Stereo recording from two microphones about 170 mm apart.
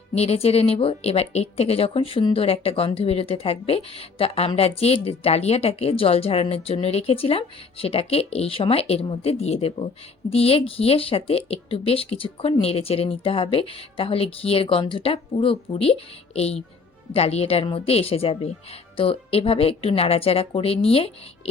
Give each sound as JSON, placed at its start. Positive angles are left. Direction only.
{"t": 0.1, "sound": "speech", "side_deg": 40}